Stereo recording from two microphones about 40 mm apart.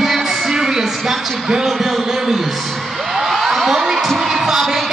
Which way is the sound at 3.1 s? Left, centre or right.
Centre.